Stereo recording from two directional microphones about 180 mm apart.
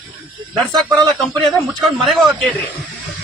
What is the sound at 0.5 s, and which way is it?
Speech, centre (ahead or behind).